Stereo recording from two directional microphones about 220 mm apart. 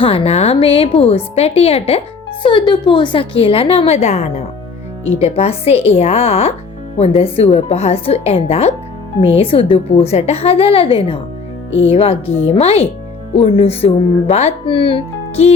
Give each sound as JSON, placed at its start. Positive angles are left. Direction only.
{"t": 0.0, "sound": "speech", "side_deg": 25}
{"t": 11.9, "sound": "speech", "side_deg": 25}